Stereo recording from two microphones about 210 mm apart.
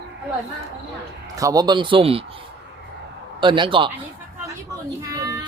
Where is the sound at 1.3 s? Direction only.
15° right (ahead or behind).